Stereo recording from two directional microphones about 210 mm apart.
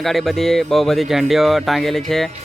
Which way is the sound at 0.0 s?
Centre (ahead or behind).